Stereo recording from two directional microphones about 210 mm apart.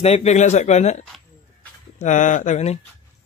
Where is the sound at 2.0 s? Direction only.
35° left (ahead or behind).